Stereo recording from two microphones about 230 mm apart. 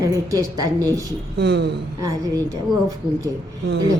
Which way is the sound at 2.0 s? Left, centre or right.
Centre.